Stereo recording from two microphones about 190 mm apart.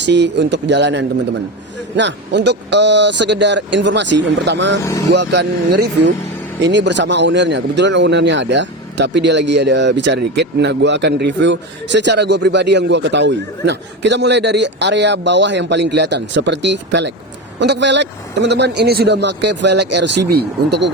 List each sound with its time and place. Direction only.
0.0 s a man's voice: 65° right (ahead or behind)